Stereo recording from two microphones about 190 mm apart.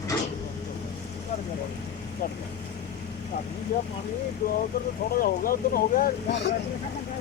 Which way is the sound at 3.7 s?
50° left (ahead or behind).